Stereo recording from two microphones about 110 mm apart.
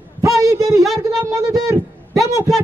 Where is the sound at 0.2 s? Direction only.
30° right (ahead or behind).